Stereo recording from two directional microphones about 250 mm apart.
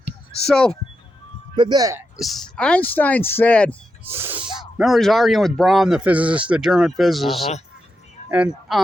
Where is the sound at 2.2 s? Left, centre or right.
Centre.